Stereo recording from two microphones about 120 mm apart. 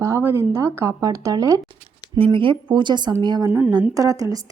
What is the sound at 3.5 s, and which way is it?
Speech, 20° right (ahead or behind).